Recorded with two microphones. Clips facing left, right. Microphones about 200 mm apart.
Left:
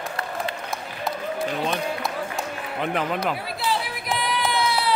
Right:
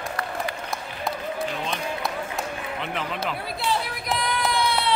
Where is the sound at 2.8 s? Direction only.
45° left (ahead or behind).